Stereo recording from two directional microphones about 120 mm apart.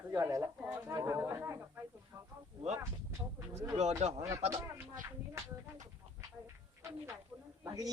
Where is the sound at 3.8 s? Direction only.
65° right (ahead or behind).